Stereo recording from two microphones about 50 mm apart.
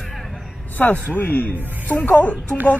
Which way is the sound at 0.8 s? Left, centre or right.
Left.